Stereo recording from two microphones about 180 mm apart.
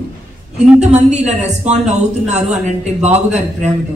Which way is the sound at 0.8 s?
40° right (ahead or behind).